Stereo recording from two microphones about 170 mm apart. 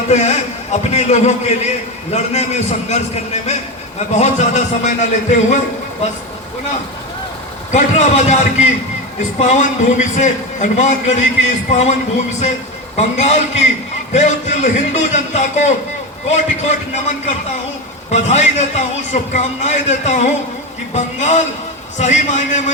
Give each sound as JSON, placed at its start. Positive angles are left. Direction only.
{"t": 0.1, "sound": "a man's voice", "side_deg": 40}
{"t": 4.1, "sound": "a man's voice", "side_deg": 40}
{"t": 7.7, "sound": "a man's voice", "side_deg": 45}
{"t": 13.0, "sound": "a man's voice", "side_deg": 40}